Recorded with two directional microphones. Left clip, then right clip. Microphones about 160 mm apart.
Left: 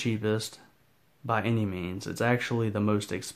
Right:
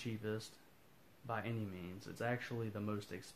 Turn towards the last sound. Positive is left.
turn(degrees=35)  # may be behind; listen again after turning